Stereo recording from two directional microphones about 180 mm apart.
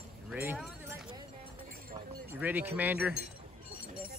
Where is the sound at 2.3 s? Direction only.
10° right (ahead or behind).